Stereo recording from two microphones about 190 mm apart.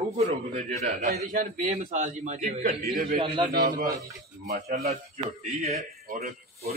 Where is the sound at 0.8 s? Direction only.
40° right (ahead or behind).